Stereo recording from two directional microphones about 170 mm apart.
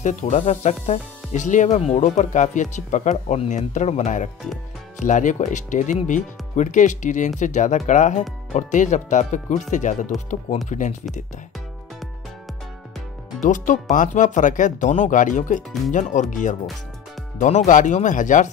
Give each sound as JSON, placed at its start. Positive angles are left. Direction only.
{"t": 0.0, "sound": "speech", "side_deg": 45}
{"t": 13.4, "sound": "speech", "side_deg": 50}